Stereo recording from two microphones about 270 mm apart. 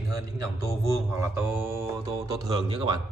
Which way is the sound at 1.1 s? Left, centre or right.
Centre.